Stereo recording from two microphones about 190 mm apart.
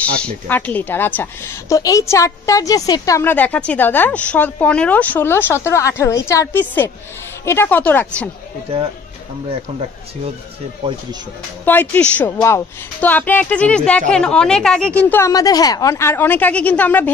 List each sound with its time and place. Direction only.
0.5 s a woman's voice: 10° left (ahead or behind)
9.5 s speech: 30° right (ahead or behind)
11.6 s a woman's voice: 10° left (ahead or behind)